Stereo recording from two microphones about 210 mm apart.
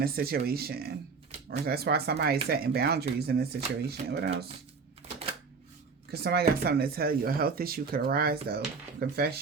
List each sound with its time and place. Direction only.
0.0 s speech: 45° right (ahead or behind)
6.1 s speech: 50° right (ahead or behind)